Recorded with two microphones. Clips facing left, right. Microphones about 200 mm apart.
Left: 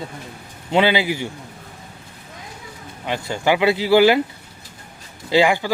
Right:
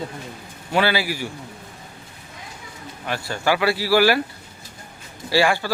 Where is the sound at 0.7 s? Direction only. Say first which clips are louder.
Left 3 dB; 20° left (ahead or behind).